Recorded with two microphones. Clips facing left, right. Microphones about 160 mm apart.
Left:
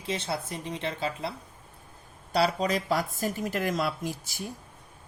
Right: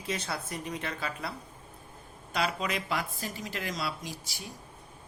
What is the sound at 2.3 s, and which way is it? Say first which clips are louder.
Speech: left 6 dB; 35° left (ahead or behind).